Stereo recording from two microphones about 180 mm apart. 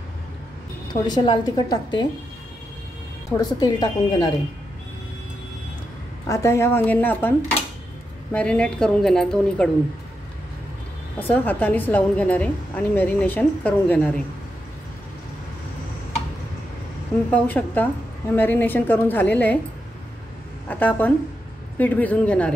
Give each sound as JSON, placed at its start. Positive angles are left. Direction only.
{"t": 1.0, "sound": "a woman's voice", "side_deg": 25}
{"t": 3.3, "sound": "a woman's voice", "side_deg": 20}
{"t": 6.2, "sound": "a woman's voice", "side_deg": 15}
{"t": 11.1, "sound": "a woman's voice", "side_deg": 10}
{"t": 17.3, "sound": "a woman's voice", "side_deg": 10}
{"t": 20.6, "sound": "a woman's voice", "side_deg": 10}